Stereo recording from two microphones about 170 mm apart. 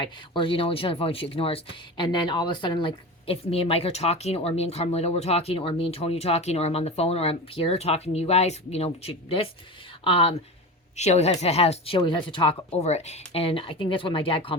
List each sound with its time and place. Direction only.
0.0 s speech: 30° left (ahead or behind)